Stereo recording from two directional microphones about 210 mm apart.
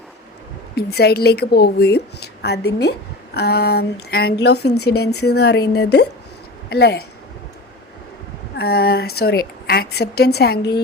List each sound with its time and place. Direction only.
0.8 s speech: 50° left (ahead or behind)
8.5 s speech: 45° left (ahead or behind)